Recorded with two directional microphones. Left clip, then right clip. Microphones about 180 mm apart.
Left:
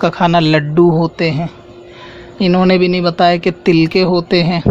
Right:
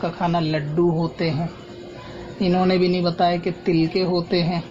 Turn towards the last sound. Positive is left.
turn(degrees=40)  # may be behind; listen again after turning